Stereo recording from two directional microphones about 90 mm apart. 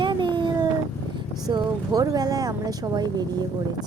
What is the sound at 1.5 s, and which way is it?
Speech, 45° right (ahead or behind).